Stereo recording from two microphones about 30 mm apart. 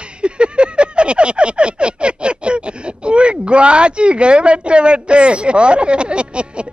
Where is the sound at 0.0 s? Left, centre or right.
Right.